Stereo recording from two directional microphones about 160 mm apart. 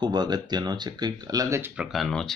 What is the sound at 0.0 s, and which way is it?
Speech, 25° right (ahead or behind).